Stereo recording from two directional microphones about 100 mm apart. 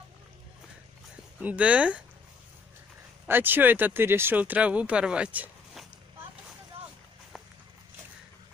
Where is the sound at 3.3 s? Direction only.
20° right (ahead or behind).